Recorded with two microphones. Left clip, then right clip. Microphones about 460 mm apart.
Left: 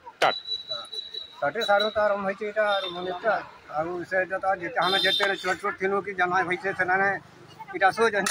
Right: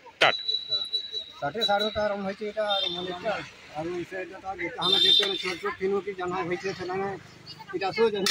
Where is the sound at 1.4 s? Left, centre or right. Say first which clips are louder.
Left 3 dB; right.